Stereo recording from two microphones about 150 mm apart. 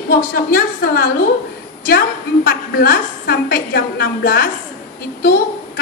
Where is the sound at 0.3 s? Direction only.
85° left.